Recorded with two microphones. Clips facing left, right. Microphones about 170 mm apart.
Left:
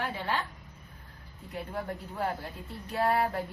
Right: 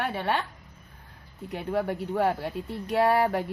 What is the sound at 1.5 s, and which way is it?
A woman's voice, 75° right (ahead or behind).